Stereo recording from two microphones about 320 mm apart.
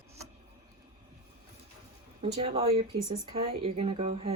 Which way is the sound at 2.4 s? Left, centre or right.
Centre.